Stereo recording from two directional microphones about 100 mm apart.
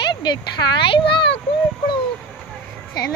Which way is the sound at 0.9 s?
60° left (ahead or behind).